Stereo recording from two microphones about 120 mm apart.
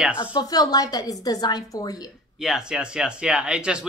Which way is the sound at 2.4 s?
5° right (ahead or behind).